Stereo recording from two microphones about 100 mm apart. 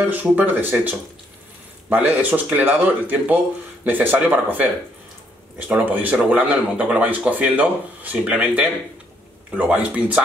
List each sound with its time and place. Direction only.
0.0 s speech: 15° right (ahead or behind)
5.9 s speech: 15° right (ahead or behind)